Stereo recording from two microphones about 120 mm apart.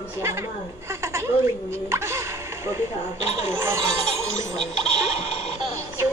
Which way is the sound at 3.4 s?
20° right (ahead or behind).